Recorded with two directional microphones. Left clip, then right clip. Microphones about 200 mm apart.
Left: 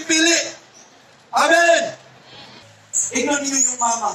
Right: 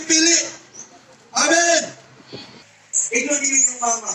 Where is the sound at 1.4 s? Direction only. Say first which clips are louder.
Left 2 dB; 10° left (ahead or behind).